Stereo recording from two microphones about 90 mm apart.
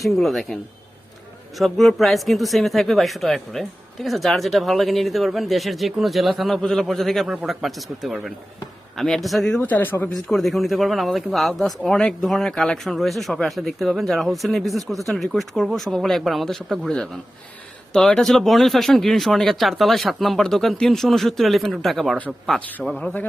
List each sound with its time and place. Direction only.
0.2 s speech: centre (ahead or behind)
9.6 s speech: 20° left (ahead or behind)
10.1 s speech: 5° left (ahead or behind)
23.0 s a man's voice: 15° left (ahead or behind)